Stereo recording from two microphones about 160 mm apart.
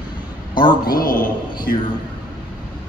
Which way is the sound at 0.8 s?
65° left (ahead or behind).